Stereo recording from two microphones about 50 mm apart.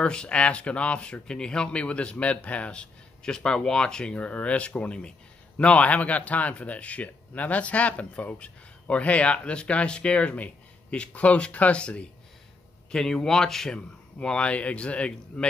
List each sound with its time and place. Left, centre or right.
0.0 s a man's voice: centre
12.9 s a man's voice: centre